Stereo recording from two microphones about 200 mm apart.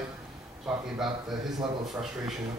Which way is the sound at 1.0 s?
Centre (ahead or behind).